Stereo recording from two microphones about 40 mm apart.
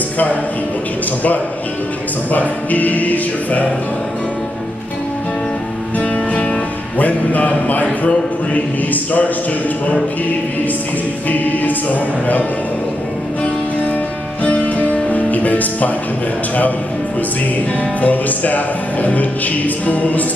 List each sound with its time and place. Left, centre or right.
2.3 s music: left
7.0 s music: left
11.2 s music: left
14.4 s music: left
18.0 s music: left